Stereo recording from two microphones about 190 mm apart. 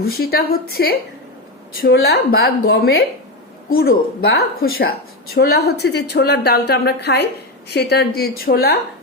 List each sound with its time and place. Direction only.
0.0 s a woman's voice: 55° left (ahead or behind)